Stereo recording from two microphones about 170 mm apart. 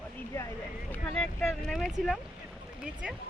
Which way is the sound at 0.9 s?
5° left (ahead or behind).